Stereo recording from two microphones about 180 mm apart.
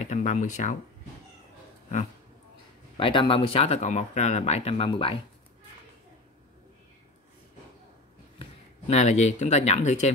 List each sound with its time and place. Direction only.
0.0 s speech: 40° left (ahead or behind)
3.0 s speech: 30° left (ahead or behind)
8.4 s speech: 35° left (ahead or behind)